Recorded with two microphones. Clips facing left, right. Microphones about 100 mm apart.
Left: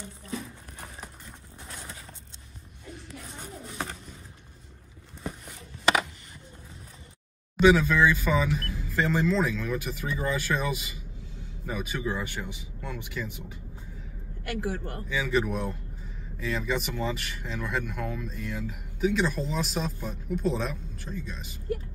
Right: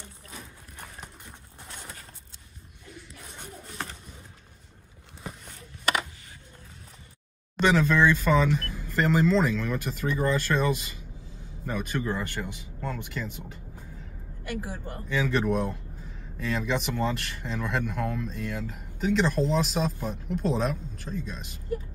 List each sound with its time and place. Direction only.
7.5 s speech: 5° left (ahead or behind)
14.4 s speech: 55° left (ahead or behind)
15.0 s speech: 5° left (ahead or behind)